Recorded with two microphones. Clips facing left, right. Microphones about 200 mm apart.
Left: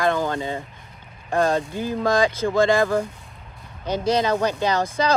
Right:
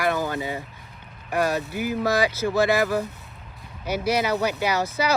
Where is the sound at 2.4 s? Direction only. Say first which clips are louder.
Left 2 dB; 50° left (ahead or behind).